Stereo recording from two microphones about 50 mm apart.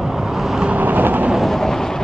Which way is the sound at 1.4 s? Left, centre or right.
Centre.